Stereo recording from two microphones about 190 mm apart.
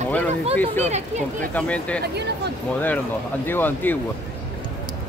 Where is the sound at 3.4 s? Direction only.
10° left (ahead or behind).